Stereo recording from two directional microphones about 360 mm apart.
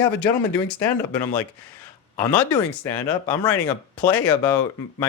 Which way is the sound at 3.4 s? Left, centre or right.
Centre.